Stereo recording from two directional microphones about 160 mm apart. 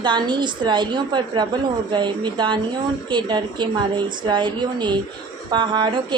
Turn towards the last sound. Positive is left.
turn(degrees=-30)  # may be behind; listen again after turning